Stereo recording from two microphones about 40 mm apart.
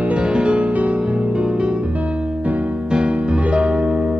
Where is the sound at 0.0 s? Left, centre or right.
Right.